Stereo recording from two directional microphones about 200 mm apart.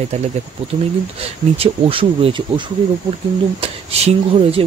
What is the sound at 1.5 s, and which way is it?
Speech, 30° right (ahead or behind).